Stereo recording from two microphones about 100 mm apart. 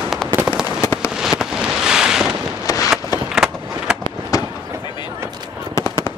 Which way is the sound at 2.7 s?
35° left (ahead or behind).